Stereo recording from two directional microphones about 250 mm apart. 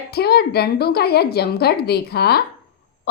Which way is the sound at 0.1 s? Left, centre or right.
Left.